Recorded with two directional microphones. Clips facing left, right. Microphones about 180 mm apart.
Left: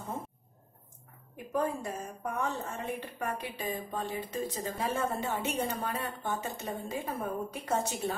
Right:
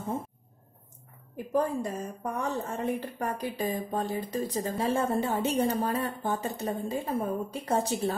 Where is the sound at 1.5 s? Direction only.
40° right (ahead or behind).